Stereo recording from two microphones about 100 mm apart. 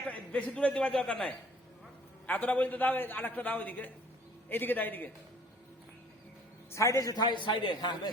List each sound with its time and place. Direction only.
0.1 s a man's voice: 15° left (ahead or behind)
6.7 s a man's voice: 30° left (ahead or behind); by 8.1 s 45° left (ahead or behind)